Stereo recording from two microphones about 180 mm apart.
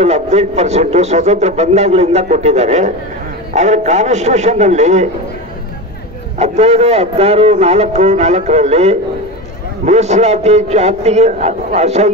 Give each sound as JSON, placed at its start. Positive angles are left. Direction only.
{"t": 0.0, "sound": "a man's voice", "side_deg": -35}
{"t": 6.3, "sound": "a man's voice", "side_deg": -35}